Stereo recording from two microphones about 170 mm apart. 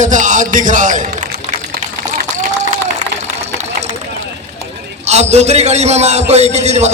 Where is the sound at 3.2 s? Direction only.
40° right (ahead or behind).